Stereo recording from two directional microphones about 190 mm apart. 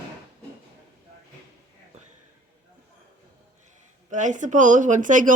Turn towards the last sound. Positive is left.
turn(degrees=-45)  # may be behind; listen again after turning